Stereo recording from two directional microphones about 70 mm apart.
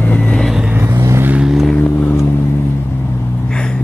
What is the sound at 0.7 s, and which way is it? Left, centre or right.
Vehicle, right.